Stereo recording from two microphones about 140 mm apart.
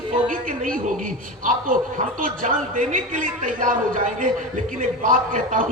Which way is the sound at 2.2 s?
70° right (ahead or behind).